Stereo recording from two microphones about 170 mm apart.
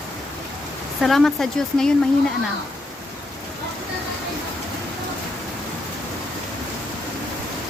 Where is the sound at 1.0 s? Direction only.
Centre (ahead or behind).